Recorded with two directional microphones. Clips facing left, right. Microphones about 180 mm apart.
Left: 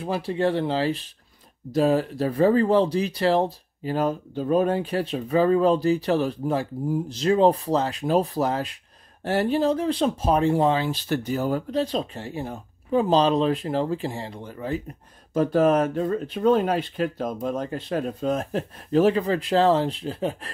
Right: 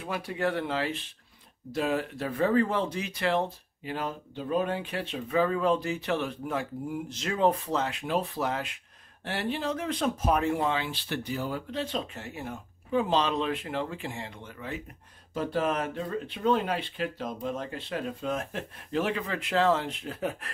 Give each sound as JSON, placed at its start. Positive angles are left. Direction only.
{"t": 0.0, "sound": "speech", "side_deg": 30}